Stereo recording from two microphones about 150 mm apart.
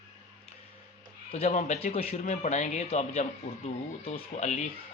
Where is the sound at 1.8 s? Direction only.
40° left (ahead or behind).